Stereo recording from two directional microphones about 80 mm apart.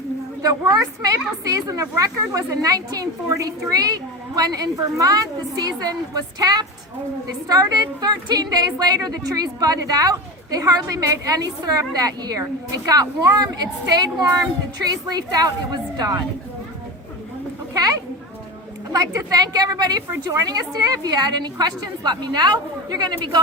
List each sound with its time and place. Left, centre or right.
0.4 s a woman's voice: right
18.9 s a woman's voice: right